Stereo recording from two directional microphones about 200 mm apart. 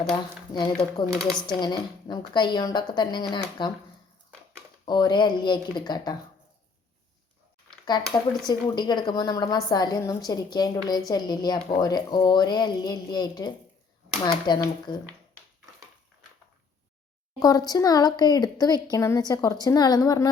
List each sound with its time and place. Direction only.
0.5 s speech: 25° left (ahead or behind)
4.9 s speech: 20° left (ahead or behind)
8.1 s speech: 20° left (ahead or behind)
17.4 s speech: 20° left (ahead or behind)